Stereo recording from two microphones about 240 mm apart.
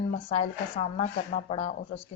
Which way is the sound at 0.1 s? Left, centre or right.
Left.